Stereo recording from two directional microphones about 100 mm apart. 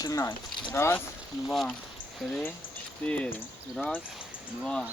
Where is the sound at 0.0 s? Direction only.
35° left (ahead or behind).